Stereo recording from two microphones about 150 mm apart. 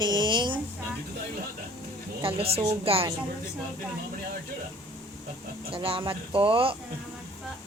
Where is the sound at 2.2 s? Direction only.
35° right (ahead or behind).